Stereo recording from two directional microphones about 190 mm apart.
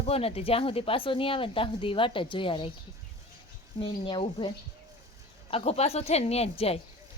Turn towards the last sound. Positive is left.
turn(degrees=30)  # may be behind; listen again after turning